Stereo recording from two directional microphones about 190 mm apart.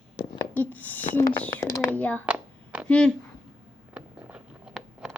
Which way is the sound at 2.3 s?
5° right (ahead or behind).